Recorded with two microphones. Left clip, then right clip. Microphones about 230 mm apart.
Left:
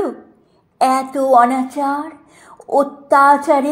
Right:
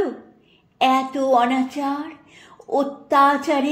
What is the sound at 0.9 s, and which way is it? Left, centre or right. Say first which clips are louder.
Speech: left 6 dB; centre.